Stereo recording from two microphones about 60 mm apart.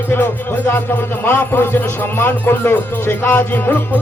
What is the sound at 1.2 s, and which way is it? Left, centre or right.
Music, left.